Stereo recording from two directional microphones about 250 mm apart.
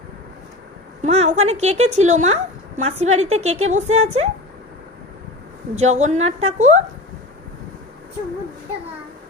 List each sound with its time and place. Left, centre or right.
1.0 s a woman's voice: right
5.7 s a woman's voice: right